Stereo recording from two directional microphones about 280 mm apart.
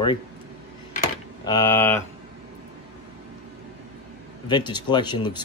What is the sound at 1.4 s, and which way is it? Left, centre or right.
Speech, centre.